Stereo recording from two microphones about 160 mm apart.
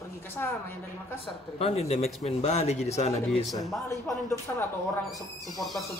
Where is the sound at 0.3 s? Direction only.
15° left (ahead or behind).